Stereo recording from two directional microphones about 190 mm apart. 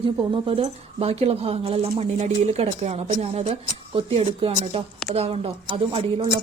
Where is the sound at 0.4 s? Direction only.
30° right (ahead or behind).